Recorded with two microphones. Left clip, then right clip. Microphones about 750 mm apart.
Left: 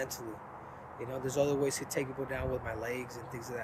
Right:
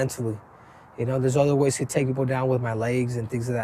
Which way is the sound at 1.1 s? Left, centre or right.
Right.